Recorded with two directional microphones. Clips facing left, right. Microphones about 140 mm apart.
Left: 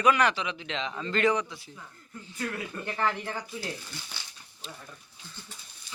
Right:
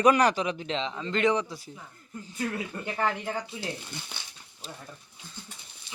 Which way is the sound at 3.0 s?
20° right (ahead or behind).